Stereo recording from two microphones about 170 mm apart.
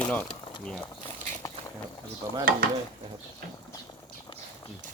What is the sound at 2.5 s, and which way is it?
Stir, 55° right (ahead or behind).